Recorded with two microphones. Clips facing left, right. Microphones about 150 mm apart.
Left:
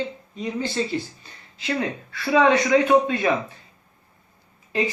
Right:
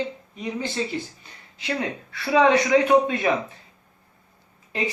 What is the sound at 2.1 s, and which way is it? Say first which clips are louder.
A man's voice: even; 20° right (ahead or behind).